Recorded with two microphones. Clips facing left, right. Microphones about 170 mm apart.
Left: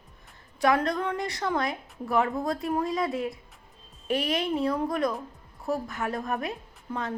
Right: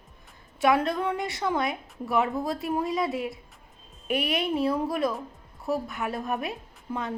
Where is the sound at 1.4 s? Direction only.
20° right (ahead or behind).